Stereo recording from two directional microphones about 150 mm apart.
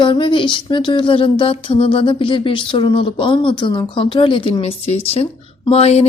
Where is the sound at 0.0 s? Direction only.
30° left (ahead or behind).